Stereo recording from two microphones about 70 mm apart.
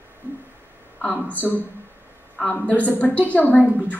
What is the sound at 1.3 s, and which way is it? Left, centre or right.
Speech, left.